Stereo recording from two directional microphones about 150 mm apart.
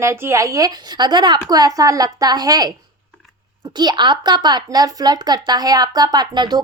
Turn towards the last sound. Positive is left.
turn(degrees=-30)  # may be behind; listen again after turning